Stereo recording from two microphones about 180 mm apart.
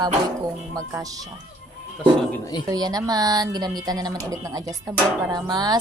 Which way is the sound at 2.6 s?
20° right (ahead or behind).